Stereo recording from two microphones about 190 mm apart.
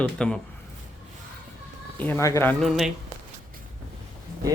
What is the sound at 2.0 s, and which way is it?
Speech, 10° left (ahead or behind).